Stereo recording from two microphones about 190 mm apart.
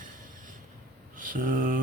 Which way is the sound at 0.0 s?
45° right (ahead or behind).